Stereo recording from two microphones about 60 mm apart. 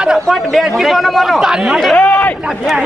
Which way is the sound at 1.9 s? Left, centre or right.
Centre.